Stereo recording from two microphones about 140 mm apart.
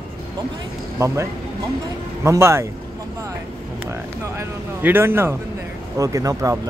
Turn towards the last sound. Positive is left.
turn(degrees=-25)  # may be behind; listen again after turning